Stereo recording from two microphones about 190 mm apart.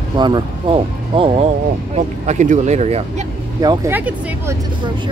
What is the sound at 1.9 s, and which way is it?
Vehicle, 40° right (ahead or behind).